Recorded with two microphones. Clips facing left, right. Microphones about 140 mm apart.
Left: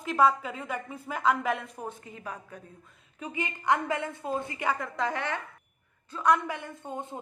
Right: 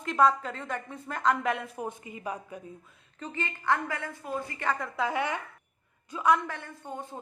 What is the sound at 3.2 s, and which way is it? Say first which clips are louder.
A woman's voice: left 1 dB; 10° left (ahead or behind).